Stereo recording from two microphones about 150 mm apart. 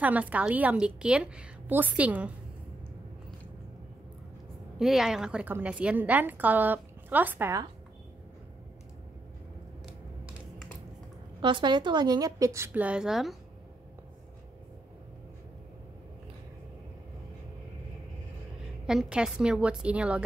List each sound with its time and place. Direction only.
0.0 s a woman's voice: 10° right (ahead or behind)
4.7 s a woman's voice: centre (ahead or behind)
11.4 s a woman's voice: 30° right (ahead or behind); by 13.4 s centre (ahead or behind)
18.9 s a woman's voice: 5° right (ahead or behind)